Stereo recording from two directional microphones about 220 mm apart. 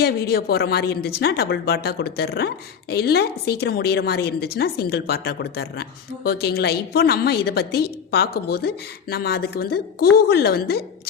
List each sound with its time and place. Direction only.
0.0 s a woman's voice: 45° left (ahead or behind)